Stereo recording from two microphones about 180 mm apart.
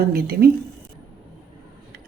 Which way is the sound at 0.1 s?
60° right (ahead or behind).